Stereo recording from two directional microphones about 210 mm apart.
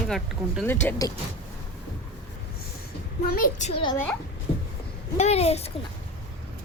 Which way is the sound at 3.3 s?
40° left (ahead or behind).